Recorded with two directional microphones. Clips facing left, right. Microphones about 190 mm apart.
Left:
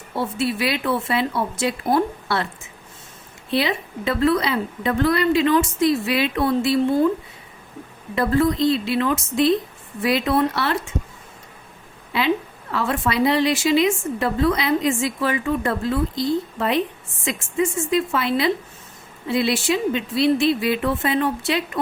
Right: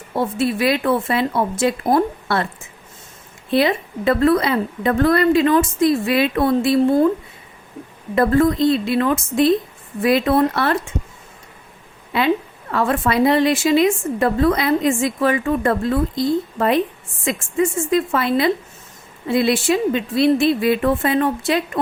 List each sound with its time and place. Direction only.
0.3 s a woman's voice: 50° right (ahead or behind)
3.5 s a woman's voice: 50° right (ahead or behind)
8.1 s a woman's voice: 50° right (ahead or behind)
12.7 s a woman's voice: 50° right (ahead or behind)